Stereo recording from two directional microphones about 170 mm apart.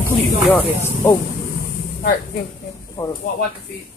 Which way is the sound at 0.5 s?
15° left (ahead or behind).